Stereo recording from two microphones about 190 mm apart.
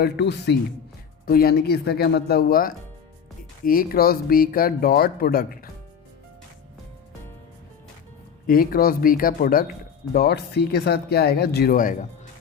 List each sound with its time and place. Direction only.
0.0 s speech: 60° left (ahead or behind)
1.2 s speech: 50° left (ahead or behind)
8.4 s speech: 50° left (ahead or behind)